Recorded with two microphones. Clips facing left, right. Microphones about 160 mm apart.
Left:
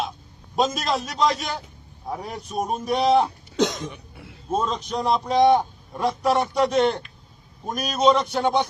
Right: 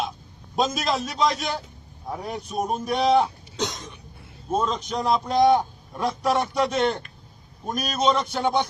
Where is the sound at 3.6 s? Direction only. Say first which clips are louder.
Left 7 dB; 70° left (ahead or behind).